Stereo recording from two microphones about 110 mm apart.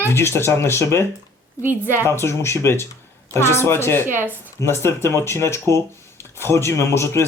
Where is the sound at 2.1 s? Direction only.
25° left (ahead or behind).